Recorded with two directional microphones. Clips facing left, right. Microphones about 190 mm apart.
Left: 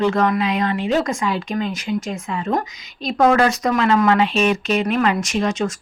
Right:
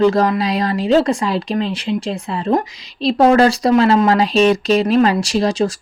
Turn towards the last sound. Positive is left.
turn(degrees=-35)  # may be behind; listen again after turning